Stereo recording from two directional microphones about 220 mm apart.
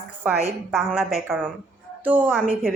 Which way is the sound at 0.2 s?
10° right (ahead or behind).